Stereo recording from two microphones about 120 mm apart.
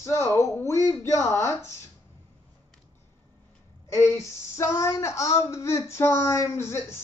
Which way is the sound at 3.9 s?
25° left (ahead or behind).